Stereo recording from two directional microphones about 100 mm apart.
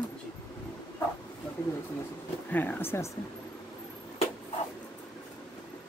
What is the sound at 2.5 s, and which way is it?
Speech, 20° left (ahead or behind).